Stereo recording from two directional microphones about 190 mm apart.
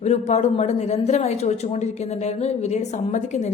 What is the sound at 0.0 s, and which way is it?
A woman's voice, 35° left (ahead or behind).